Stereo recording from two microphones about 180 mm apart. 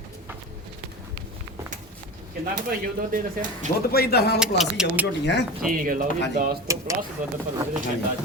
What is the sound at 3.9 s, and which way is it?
Speech, 60° left (ahead or behind).